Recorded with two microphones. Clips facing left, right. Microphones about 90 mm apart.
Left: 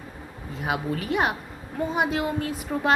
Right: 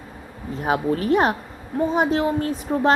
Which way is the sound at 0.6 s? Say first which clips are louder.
Right 6 dB; 40° right (ahead or behind).